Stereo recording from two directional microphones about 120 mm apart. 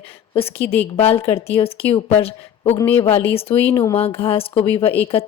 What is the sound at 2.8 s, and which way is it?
A woman's voice, 15° left (ahead or behind).